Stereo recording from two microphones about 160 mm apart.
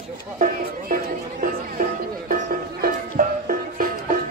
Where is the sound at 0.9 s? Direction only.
60° right (ahead or behind).